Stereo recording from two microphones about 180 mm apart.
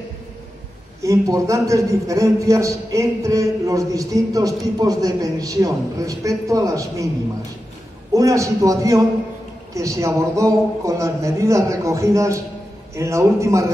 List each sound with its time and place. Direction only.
1.0 s a man's voice: 20° right (ahead or behind)
8.1 s a man's voice: 20° right (ahead or behind)